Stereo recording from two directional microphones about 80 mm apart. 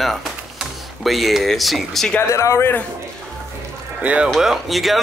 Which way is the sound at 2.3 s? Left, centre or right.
Left.